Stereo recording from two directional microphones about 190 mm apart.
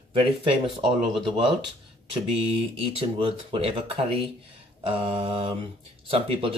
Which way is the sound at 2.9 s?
30° right (ahead or behind).